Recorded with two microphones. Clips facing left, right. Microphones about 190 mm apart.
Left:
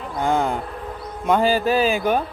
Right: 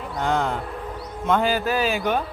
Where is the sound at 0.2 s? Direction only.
10° left (ahead or behind).